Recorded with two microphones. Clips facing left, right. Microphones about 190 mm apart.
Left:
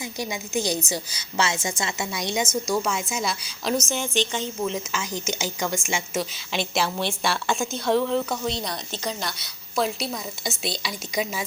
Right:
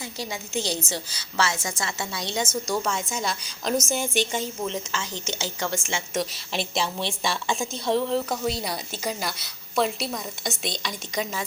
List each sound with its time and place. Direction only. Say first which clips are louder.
0.0 s a woman's voice: left 3 dB; 15° left (ahead or behind)
2.5 s a woman's voice: left 2 dB; 10° right (ahead or behind)
2.8 s a woman's voice: left 1 dB; 10° left (ahead or behind)
3.9 s a woman's voice: even; 10° right (ahead or behind)
4.9 s a woman's voice: left 3 dB; 10° left (ahead or behind)
6.5 s a woman's voice: left 5 dB; centre (ahead or behind)